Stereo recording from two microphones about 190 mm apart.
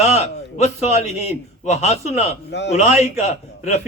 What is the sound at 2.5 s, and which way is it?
Speech, 65° left (ahead or behind).